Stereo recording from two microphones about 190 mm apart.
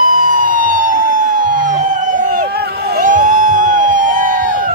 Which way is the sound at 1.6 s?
40° right (ahead or behind).